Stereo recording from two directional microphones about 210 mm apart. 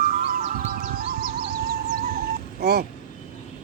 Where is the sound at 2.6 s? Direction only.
50° right (ahead or behind).